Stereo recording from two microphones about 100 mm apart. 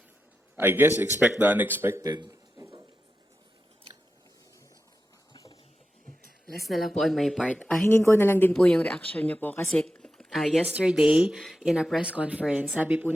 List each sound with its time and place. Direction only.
0.5 s a man's voice: 20° right (ahead or behind)
2.0 s a sound: 45° right (ahead or behind)
6.6 s speech: centre (ahead or behind)
7.9 s a woman's voice: 20° left (ahead or behind)
8.5 s speech: 10° left (ahead or behind)
10.7 s speech: 10° right (ahead or behind)